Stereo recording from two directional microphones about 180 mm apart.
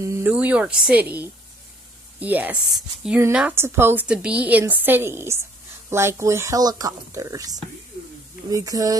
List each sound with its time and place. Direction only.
0.0 s a woman's voice: 15° right (ahead or behind)